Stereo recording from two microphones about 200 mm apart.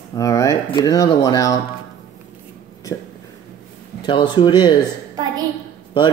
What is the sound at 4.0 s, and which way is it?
Speech, 25° left (ahead or behind).